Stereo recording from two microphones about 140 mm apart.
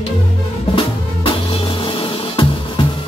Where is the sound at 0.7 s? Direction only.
40° left (ahead or behind).